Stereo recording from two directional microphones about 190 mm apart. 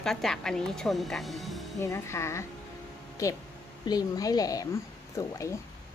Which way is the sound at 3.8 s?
20° left (ahead or behind).